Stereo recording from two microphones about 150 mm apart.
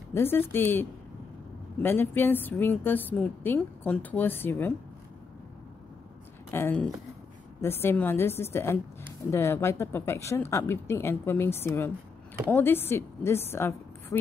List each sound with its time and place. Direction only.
0.1 s a woman's voice: 15° left (ahead or behind)
6.5 s a woman's voice: 10° left (ahead or behind)